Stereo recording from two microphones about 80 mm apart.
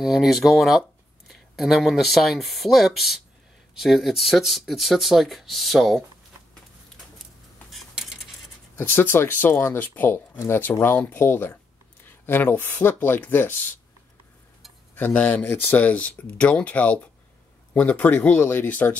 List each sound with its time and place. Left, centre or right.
0.0 s speech: centre
7.9 s a sound: centre
8.7 s speech: left
15.0 s speech: left